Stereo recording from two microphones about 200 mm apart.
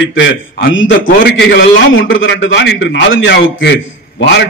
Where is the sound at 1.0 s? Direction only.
55° left (ahead or behind).